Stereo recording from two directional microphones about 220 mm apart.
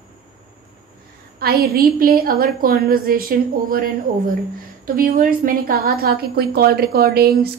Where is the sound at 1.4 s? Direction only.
45° right (ahead or behind).